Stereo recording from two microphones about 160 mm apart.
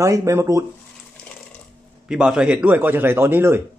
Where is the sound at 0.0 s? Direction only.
20° right (ahead or behind).